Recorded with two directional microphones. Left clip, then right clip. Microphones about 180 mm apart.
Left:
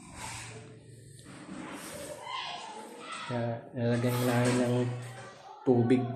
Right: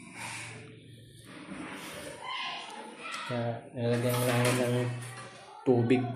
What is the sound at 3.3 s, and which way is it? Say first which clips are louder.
Speech: left 3 dB; 25° left (ahead or behind).